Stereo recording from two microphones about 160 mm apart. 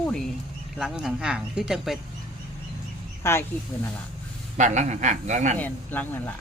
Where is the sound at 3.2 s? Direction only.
15° left (ahead or behind).